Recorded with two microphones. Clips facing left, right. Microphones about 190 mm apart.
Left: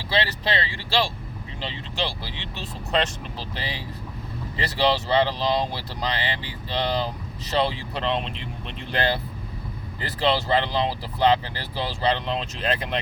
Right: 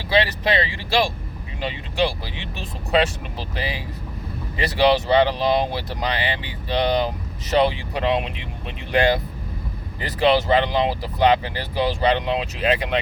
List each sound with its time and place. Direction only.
0.1 s speech: 15° right (ahead or behind)